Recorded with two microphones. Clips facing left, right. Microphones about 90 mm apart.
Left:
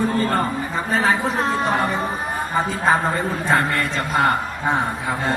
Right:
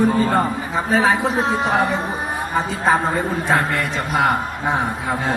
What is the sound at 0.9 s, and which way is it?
Speech, 5° right (ahead or behind).